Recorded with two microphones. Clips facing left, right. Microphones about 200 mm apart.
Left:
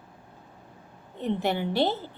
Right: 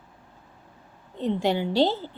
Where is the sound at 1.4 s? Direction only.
15° right (ahead or behind).